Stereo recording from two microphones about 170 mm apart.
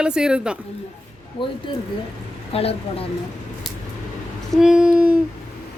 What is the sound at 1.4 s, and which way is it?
Speech, 30° left (ahead or behind).